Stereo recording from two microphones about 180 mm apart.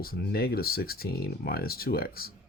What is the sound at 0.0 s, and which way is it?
Speech, 60° left (ahead or behind).